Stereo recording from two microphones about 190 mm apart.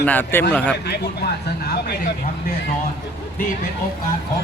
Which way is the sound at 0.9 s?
60° left (ahead or behind).